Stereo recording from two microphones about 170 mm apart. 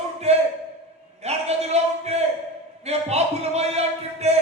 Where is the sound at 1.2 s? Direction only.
40° right (ahead or behind).